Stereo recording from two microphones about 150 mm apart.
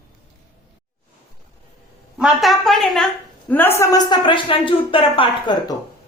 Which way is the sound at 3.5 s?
15° left (ahead or behind).